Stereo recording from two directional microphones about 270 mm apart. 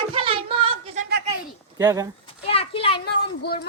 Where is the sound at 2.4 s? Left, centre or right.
Left.